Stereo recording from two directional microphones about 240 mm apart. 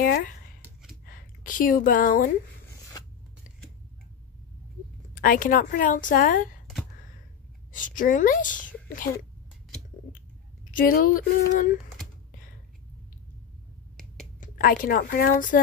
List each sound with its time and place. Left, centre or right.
0.0 s speech: left
5.1 s a woman's voice: left
7.7 s speech: left
10.7 s a woman's voice: left
14.4 s a woman's voice: left